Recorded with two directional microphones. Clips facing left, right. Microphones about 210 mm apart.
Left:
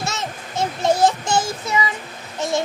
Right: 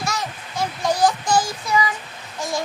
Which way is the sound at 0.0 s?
25° left (ahead or behind).